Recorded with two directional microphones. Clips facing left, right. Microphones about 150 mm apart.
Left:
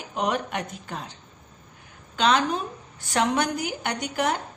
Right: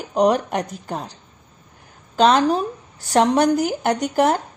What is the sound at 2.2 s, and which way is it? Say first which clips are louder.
Speech: right 7 dB; 40° right (ahead or behind).